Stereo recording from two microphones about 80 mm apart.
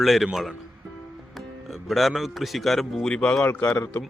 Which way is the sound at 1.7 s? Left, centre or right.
Centre.